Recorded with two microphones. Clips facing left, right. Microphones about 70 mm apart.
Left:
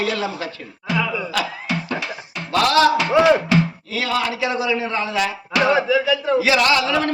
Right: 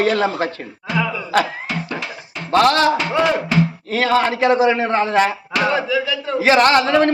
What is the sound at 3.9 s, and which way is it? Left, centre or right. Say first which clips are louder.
A man's voice: right 6 dB; right.